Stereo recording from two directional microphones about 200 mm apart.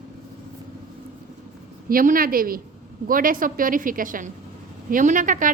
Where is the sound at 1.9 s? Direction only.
45° right (ahead or behind).